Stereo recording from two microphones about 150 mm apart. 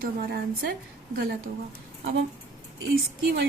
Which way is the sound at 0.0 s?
80° right.